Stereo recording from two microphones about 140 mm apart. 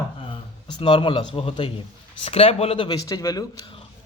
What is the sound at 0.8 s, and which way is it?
A man's voice, 35° left (ahead or behind).